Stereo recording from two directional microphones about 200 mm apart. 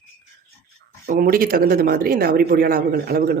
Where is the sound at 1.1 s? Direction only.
45° right (ahead or behind).